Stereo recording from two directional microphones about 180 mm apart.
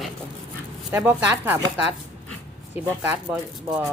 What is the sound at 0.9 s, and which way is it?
Speech, 10° right (ahead or behind).